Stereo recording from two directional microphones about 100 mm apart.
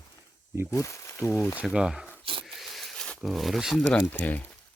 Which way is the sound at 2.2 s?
60° right (ahead or behind).